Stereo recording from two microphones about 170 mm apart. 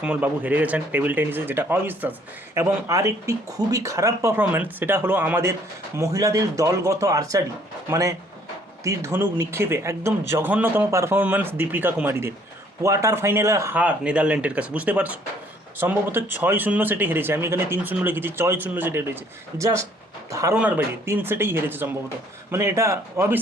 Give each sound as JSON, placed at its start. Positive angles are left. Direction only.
{"t": 0.0, "sound": "speech", "side_deg": -10}